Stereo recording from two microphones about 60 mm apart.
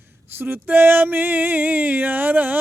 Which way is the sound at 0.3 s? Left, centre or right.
Right.